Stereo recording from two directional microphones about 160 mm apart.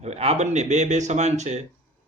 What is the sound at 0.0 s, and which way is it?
Speech, 40° right (ahead or behind).